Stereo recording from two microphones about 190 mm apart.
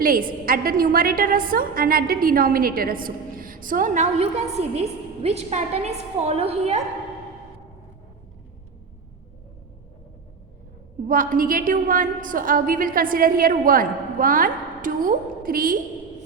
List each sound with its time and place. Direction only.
0.0 s a woman's voice: 50° right (ahead or behind)
11.1 s a woman's voice: 45° right (ahead or behind)